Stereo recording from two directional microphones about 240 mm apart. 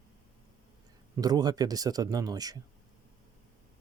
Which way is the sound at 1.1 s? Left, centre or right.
Centre.